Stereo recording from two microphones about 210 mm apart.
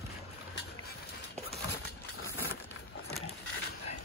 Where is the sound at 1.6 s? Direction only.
55° left (ahead or behind).